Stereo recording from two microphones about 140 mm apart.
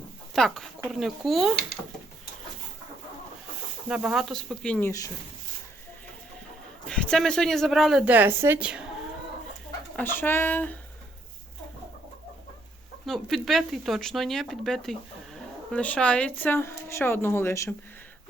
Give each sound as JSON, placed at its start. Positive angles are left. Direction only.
{"t": 0.3, "sound": "speech", "side_deg": 0}
{"t": 3.8, "sound": "speech", "side_deg": -5}
{"t": 4.9, "sound": "speech", "side_deg": 25}
{"t": 6.8, "sound": "speech", "side_deg": 5}
{"t": 9.9, "sound": "speech", "side_deg": 15}
{"t": 13.1, "sound": "speech", "side_deg": 0}